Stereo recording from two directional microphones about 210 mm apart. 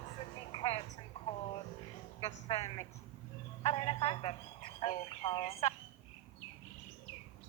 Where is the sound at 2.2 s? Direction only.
25° left (ahead or behind).